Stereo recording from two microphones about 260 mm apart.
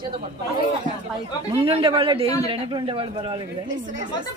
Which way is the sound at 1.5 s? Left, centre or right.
Right.